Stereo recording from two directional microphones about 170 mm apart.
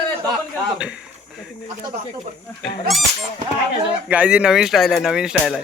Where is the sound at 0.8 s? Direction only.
5° right (ahead or behind).